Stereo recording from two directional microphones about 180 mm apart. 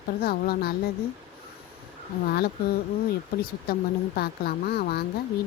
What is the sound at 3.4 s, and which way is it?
A woman's voice, 55° left (ahead or behind).